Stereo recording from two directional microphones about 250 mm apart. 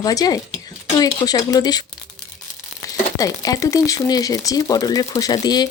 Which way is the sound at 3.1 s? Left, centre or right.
Centre.